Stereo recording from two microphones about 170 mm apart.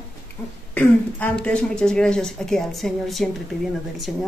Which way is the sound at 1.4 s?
5° left (ahead or behind).